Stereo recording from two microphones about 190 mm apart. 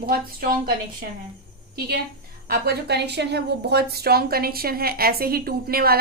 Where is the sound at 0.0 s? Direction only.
50° right (ahead or behind).